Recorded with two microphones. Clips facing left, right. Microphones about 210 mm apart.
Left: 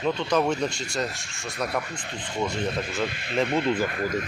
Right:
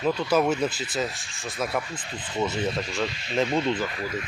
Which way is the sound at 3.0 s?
55° left (ahead or behind).